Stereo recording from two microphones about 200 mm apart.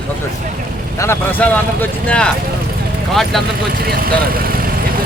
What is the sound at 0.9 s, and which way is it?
Speech, 10° left (ahead or behind).